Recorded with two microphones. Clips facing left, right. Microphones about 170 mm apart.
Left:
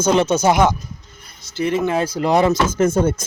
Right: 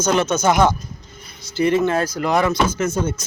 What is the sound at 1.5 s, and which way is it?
Speech, centre (ahead or behind).